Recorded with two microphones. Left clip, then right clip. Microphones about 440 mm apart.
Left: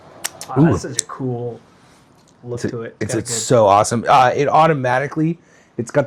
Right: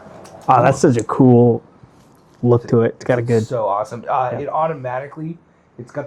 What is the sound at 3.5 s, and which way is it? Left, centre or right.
Speech, left.